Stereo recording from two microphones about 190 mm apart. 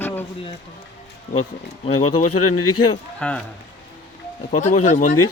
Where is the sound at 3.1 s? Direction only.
5° left (ahead or behind).